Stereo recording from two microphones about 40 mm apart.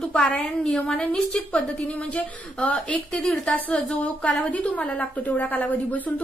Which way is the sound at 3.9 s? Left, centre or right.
Left.